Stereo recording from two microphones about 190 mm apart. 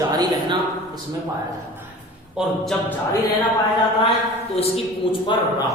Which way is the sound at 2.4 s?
5° right (ahead or behind).